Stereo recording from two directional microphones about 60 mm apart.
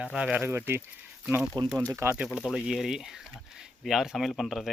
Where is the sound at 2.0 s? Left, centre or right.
Right.